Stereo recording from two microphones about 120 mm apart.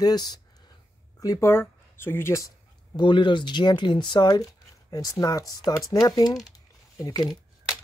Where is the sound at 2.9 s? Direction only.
40° left (ahead or behind).